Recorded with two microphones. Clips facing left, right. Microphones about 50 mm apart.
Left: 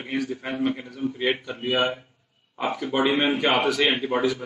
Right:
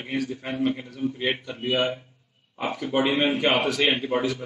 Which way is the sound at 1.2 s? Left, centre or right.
Left.